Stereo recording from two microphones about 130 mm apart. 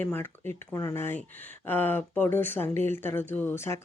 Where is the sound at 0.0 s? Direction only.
15° left (ahead or behind).